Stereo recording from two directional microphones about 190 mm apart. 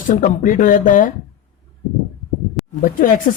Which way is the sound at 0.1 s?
40° left (ahead or behind).